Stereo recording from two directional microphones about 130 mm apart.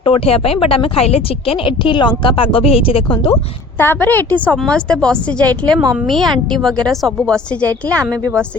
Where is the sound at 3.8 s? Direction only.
15° left (ahead or behind).